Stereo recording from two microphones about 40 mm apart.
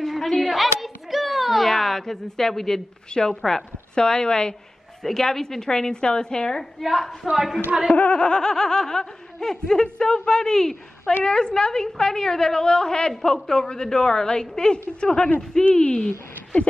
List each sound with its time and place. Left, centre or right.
0.0 s hands: centre
3.1 s a woman's voice: centre
6.8 s a woman's voice: centre
7.9 s snicker: left; by 10.8 s centre
11.1 s a woman's voice: left
13.2 s snicker: centre